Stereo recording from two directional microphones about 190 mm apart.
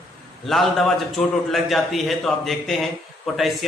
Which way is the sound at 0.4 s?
Centre (ahead or behind).